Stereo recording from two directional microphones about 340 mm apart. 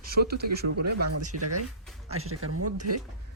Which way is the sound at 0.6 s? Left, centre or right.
Right.